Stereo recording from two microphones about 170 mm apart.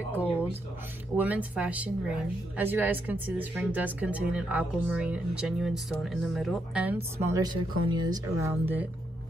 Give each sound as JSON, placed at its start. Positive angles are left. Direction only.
{"t": 1.1, "sound": "speech", "side_deg": -10}
{"t": 7.2, "sound": "speech", "side_deg": -15}